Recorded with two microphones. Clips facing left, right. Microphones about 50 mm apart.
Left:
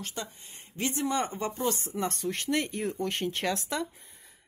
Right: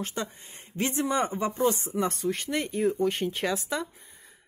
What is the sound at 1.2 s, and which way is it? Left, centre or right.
Speech, centre.